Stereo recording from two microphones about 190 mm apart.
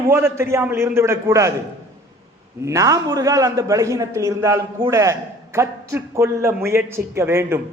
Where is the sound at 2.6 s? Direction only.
15° right (ahead or behind).